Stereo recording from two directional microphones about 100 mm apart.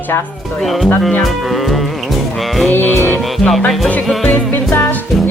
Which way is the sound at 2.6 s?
20° left (ahead or behind).